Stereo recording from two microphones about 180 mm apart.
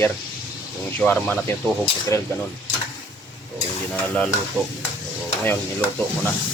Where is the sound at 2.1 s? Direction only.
15° left (ahead or behind).